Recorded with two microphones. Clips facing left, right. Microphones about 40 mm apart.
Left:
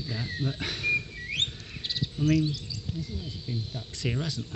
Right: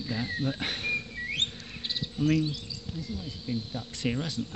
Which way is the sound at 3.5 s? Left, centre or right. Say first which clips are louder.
Right 3 dB; right.